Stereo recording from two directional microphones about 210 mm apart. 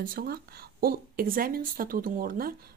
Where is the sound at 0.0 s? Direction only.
45° right (ahead or behind).